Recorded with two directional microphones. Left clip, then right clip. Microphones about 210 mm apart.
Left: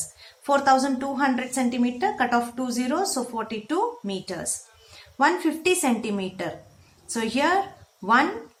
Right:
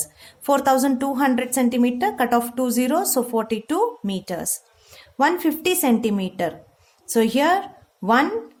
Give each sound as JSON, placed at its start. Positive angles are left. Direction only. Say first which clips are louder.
{"t": 0.2, "sound": "a woman's voice", "louder": "right 2 dB", "side_deg": -45}